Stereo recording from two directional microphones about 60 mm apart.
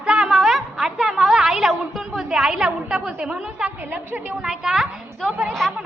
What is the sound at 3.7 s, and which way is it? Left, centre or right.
Speech, right.